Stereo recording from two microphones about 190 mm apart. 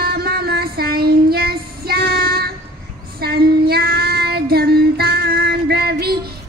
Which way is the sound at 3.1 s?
55° right (ahead or behind).